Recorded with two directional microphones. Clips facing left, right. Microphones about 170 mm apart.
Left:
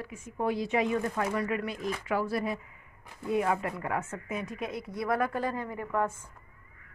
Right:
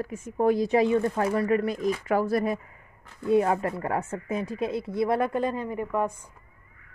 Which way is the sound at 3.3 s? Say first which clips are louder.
Right 6 dB; 35° right (ahead or behind).